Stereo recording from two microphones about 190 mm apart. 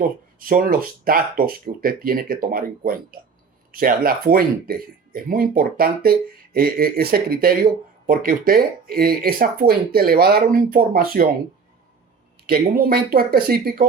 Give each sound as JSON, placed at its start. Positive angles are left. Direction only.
{"t": 0.0, "sound": "speech", "side_deg": -50}
{"t": 12.5, "sound": "speech", "side_deg": -50}